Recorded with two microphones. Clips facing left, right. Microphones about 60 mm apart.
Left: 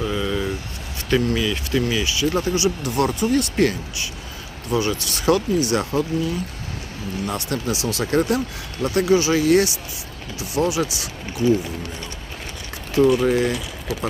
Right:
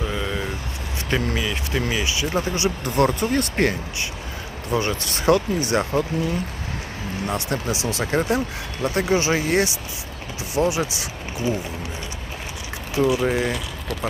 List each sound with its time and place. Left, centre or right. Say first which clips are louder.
0.1 s vehicle: left 3 dB; centre
1.1 s speech: left 4 dB; right
7.3 s speech: even; right
12.9 s speech: left 4 dB; centre